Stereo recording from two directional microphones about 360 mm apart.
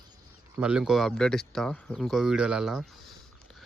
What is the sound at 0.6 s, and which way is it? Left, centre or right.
Speech, centre.